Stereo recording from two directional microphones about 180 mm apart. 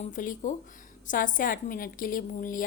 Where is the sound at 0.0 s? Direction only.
45° left (ahead or behind).